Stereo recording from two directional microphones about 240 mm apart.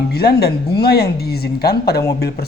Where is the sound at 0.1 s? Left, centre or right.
Left.